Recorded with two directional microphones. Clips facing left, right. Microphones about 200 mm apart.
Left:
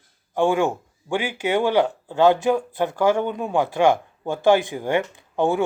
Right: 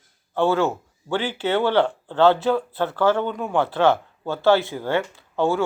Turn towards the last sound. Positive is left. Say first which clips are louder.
# left 1 dB
turn(degrees=15)  # may be behind; listen again after turning